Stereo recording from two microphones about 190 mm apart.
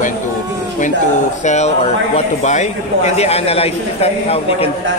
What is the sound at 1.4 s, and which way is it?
A man's voice, 35° left (ahead or behind).